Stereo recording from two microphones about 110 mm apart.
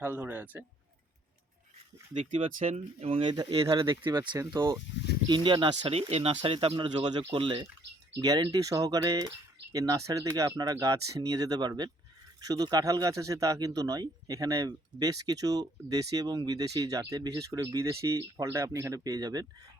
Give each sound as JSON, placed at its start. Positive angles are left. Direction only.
{"t": 0.0, "sound": "speech", "side_deg": -15}
{"t": 2.3, "sound": "speech", "side_deg": -60}
{"t": 3.8, "sound": "speech", "side_deg": -45}
{"t": 5.3, "sound": "speech", "side_deg": -50}
{"t": 8.2, "sound": "speech", "side_deg": -35}